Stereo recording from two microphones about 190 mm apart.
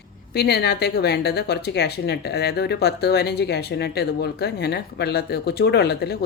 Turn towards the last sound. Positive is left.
turn(degrees=60)  # may be behind; listen again after turning